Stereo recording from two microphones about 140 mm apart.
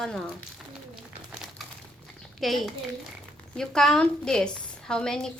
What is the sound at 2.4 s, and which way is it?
A woman's voice, centre (ahead or behind).